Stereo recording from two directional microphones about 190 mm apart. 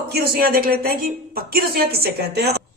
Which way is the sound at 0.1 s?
55° right (ahead or behind).